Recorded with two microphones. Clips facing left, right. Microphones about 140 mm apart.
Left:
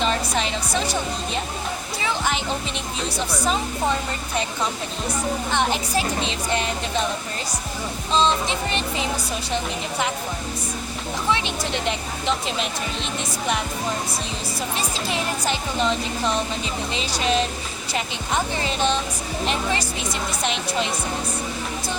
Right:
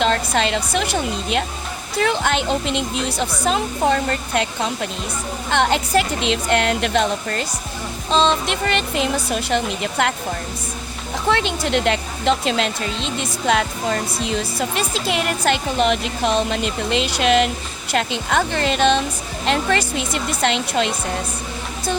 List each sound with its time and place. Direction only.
0.0 s speech: 75° right (ahead or behind)
2.0 s speech: 70° right (ahead or behind)
5.5 s speech: 70° right (ahead or behind)
11.3 s speech: 65° right (ahead or behind); by 18.9 s 80° right
19.5 s speech: 70° right (ahead or behind)